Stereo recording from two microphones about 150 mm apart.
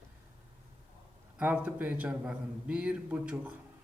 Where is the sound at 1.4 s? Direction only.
10° right (ahead or behind).